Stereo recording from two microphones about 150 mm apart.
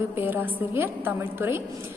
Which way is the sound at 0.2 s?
15° right (ahead or behind).